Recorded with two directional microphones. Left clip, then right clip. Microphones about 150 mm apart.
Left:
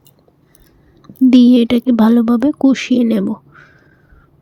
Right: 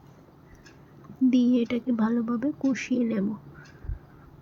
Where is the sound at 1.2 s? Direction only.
65° left (ahead or behind).